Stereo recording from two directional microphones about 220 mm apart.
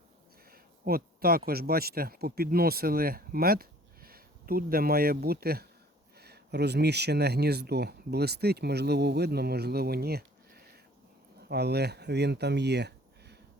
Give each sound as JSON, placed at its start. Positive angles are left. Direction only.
{"t": 0.5, "sound": "speech", "side_deg": -45}